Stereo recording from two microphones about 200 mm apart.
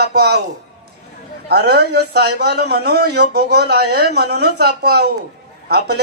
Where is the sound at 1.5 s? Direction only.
55° right (ahead or behind).